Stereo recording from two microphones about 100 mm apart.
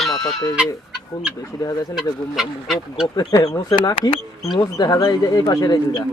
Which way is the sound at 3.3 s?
40° left (ahead or behind).